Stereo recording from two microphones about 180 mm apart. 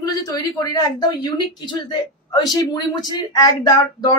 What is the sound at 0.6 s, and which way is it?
A man's voice, 20° left (ahead or behind).